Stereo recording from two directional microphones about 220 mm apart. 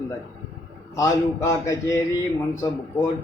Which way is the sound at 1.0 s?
15° left (ahead or behind).